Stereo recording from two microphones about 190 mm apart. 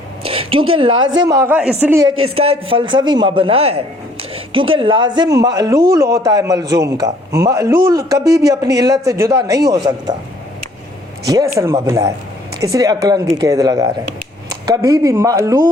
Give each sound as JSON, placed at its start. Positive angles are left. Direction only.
{"t": 0.2, "sound": "a sound", "side_deg": -30}
{"t": 0.9, "sound": "speech", "side_deg": -90}
{"t": 1.3, "sound": "speech", "side_deg": -15}
{"t": 2.3, "sound": "a man's voice", "side_deg": -30}
{"t": 11.3, "sound": "a man's voice", "side_deg": -15}